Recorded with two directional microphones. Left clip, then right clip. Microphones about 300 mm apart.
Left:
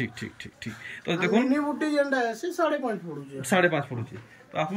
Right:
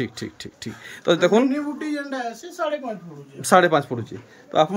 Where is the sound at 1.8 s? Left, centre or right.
Centre.